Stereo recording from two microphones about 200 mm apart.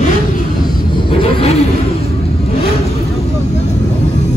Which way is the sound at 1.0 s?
25° left (ahead or behind).